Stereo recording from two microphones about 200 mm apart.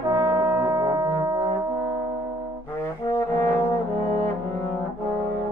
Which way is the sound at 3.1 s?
10° left (ahead or behind).